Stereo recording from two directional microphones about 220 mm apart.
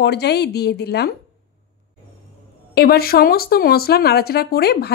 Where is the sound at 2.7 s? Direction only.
45° left (ahead or behind).